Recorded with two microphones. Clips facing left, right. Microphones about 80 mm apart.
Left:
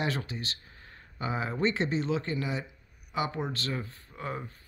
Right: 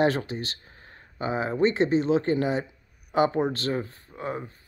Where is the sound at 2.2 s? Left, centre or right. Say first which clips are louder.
Right 8 dB; right.